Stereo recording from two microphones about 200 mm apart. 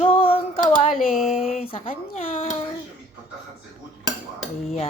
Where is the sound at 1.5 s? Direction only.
30° left (ahead or behind).